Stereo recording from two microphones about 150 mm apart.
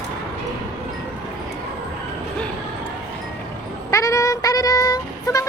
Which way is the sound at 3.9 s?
20° left (ahead or behind).